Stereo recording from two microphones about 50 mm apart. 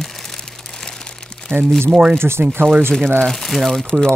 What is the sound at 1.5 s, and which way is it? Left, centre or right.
Speech, right.